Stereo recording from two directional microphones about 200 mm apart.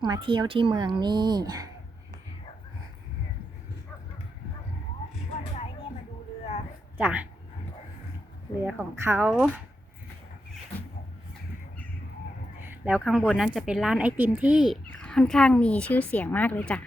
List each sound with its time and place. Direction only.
0.0 s a woman's voice: 25° right (ahead or behind)
6.9 s speech: 10° right (ahead or behind)
8.6 s speech: 10° right (ahead or behind)
12.5 s a woman's voice: 10° right (ahead or behind); by 16.8 s 5° left (ahead or behind)